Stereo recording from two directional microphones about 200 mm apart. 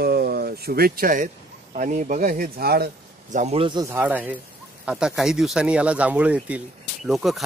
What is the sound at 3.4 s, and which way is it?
Speech, 30° right (ahead or behind).